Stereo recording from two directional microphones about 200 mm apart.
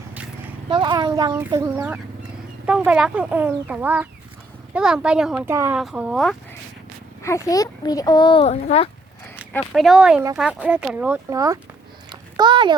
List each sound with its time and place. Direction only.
0.1 s vehicle: 10° right (ahead or behind)
0.7 s a child's voice: 20° right (ahead or behind); by 6.3 s centre (ahead or behind)
7.2 s a child's voice: 15° left (ahead or behind); by 8.9 s 30° left (ahead or behind)
9.5 s a child's voice: centre (ahead or behind); by 12.7 s 25° right (ahead or behind)